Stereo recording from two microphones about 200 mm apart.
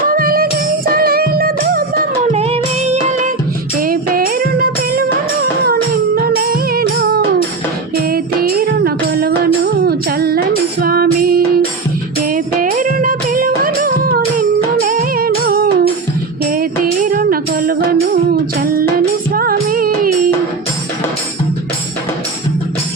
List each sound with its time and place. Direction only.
0.1 s music: 45° right (ahead or behind)
2.3 s music: 35° right (ahead or behind)